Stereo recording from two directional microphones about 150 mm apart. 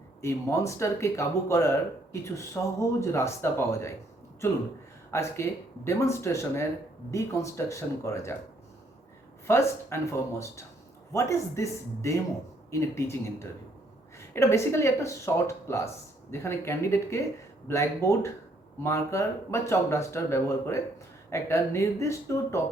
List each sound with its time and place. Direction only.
0.2 s speech: 20° left (ahead or behind)
5.1 s speech: 20° left (ahead or behind)
9.5 s speech: 15° left (ahead or behind)